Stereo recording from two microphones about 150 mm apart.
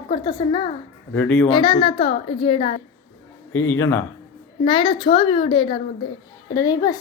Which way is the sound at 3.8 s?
15° left (ahead or behind).